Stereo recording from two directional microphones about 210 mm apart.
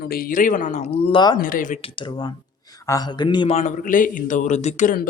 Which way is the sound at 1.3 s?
40° left (ahead or behind).